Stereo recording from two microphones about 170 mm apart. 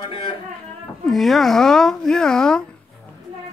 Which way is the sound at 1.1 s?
Centre (ahead or behind).